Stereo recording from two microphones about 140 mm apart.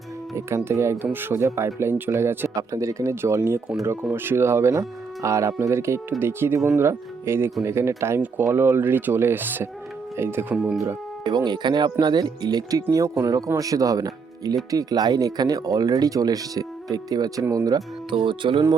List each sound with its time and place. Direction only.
0.3 s speech: 20° right (ahead or behind)
10.5 s speech: 5° right (ahead or behind)
11.2 s speech: 30° right (ahead or behind)
18.1 s speech: 35° right (ahead or behind)